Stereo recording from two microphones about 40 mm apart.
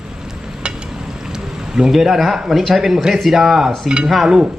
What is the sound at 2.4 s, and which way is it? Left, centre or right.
A man's voice, centre.